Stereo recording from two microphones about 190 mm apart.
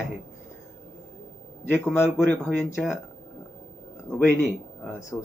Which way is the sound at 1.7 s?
10° left (ahead or behind).